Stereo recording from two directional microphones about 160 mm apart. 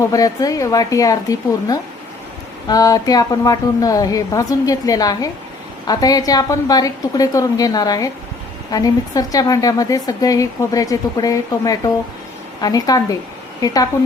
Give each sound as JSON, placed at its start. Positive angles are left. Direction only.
{"t": 0.0, "sound": "a woman's voice", "side_deg": 20}